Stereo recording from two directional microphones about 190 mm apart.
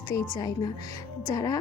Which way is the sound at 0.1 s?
20° left (ahead or behind).